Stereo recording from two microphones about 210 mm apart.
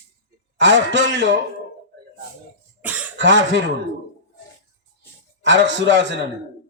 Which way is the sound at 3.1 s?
60° right (ahead or behind).